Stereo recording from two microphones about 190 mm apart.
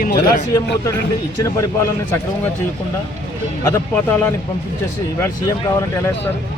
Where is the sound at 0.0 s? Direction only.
50° left (ahead or behind).